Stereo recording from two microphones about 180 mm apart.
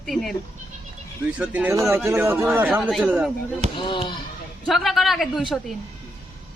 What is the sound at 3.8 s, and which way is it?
Speech, 25° left (ahead or behind).